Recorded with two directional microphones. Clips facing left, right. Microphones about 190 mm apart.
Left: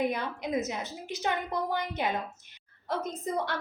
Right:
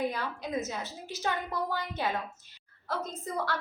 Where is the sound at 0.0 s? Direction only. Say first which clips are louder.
Left 2 dB; 20° left (ahead or behind).